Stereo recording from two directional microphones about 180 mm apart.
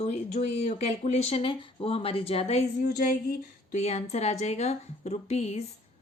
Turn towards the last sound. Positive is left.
turn(degrees=35)  # may be behind; listen again after turning